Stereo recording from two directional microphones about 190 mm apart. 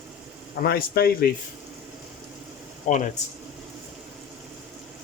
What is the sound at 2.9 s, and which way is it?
Speech, 40° left (ahead or behind).